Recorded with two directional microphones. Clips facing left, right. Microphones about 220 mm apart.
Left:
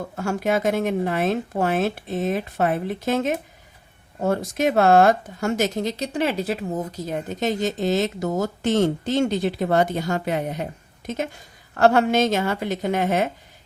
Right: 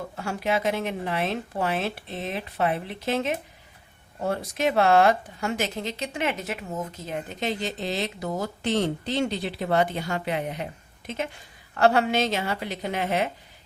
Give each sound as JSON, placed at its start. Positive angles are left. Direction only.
{"t": 0.2, "sound": "speech", "side_deg": 45}